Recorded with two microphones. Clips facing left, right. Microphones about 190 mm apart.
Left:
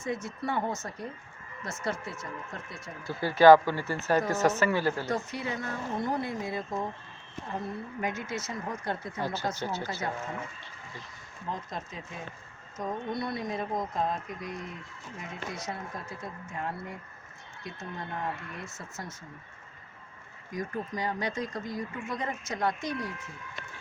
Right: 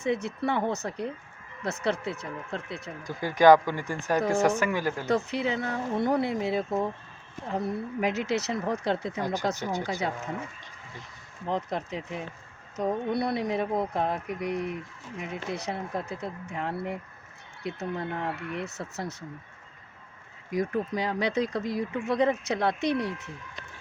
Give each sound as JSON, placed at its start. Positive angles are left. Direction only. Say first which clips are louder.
{"t": 0.0, "sound": "speech", "louder": "right 5 dB", "side_deg": -65}
{"t": 3.0, "sound": "speech", "louder": "even", "side_deg": -15}
{"t": 5.0, "sound": "speech", "louder": "right 6 dB", "side_deg": -65}
{"t": 11.4, "sound": "speech", "louder": "right 7 dB", "side_deg": -70}
{"t": 20.5, "sound": "speech", "louder": "right 6 dB", "side_deg": -70}